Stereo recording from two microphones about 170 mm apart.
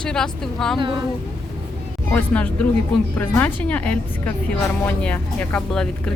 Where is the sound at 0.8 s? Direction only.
30° right (ahead or behind).